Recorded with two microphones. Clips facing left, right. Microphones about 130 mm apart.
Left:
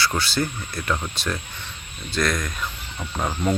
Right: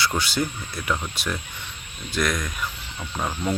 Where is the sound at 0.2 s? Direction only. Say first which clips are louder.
Left 1 dB; 15° right (ahead or behind).